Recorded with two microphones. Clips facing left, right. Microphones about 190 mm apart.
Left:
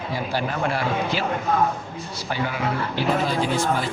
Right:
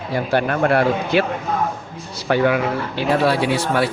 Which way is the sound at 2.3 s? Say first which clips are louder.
Right 9 dB; 65° right (ahead or behind).